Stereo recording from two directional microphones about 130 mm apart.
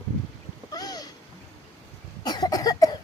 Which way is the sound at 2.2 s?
30° left (ahead or behind).